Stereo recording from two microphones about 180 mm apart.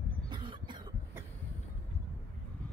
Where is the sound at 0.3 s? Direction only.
25° right (ahead or behind).